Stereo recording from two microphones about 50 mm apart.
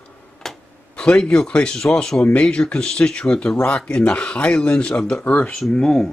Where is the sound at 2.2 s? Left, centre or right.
Left.